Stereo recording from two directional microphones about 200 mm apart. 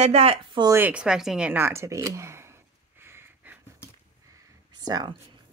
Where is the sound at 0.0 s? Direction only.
30° right (ahead or behind).